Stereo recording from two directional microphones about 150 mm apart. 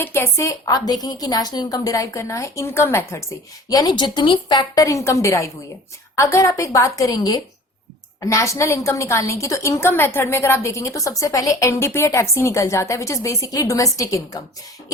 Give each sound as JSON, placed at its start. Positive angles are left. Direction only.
{"t": 0.0, "sound": "a woman's voice", "side_deg": 15}